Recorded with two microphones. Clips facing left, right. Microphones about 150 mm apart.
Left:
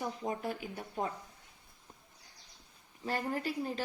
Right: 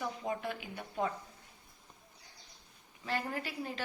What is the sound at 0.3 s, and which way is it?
Speech, 40° left (ahead or behind).